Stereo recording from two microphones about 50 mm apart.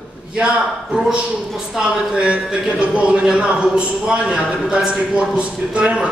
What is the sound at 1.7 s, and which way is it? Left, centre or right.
A man's voice, centre.